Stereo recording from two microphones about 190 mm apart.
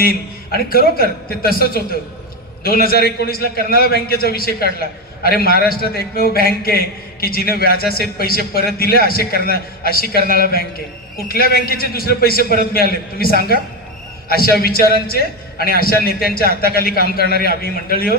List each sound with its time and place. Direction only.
0.0 s a man's voice: 55° left (ahead or behind)